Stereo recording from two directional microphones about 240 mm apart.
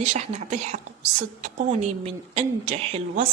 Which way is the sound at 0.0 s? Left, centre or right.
Right.